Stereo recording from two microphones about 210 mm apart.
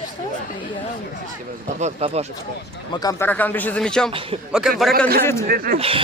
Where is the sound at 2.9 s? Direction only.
15° left (ahead or behind).